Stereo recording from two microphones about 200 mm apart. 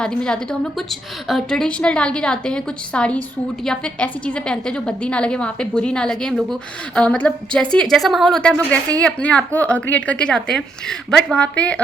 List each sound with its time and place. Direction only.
0.0 s a woman's voice: 5° left (ahead or behind)